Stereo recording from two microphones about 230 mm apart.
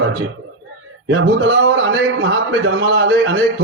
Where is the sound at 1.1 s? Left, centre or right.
Right.